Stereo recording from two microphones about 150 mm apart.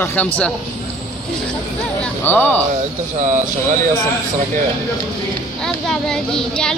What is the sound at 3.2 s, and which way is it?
Speech, 60° right (ahead or behind).